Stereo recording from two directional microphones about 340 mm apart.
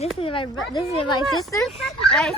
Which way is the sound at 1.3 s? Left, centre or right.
Centre.